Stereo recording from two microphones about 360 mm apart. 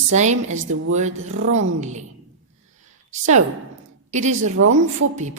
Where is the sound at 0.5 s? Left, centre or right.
Right.